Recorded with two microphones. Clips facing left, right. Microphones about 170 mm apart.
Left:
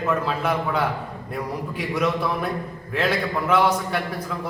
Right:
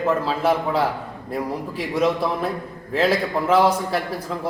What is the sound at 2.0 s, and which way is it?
A man's voice, 30° right (ahead or behind).